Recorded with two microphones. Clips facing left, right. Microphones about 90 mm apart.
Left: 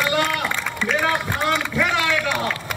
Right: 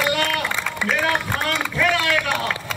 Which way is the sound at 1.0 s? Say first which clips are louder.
Left 2 dB; 15° left (ahead or behind).